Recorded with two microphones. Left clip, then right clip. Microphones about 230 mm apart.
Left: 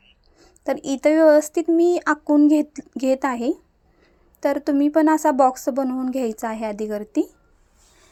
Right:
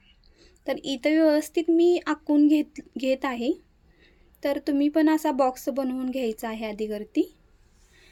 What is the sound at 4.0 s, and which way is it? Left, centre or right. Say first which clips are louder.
Speech: left 6 dB; centre.